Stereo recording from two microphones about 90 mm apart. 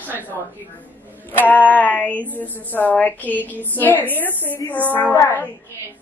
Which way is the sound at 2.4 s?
20° left (ahead or behind).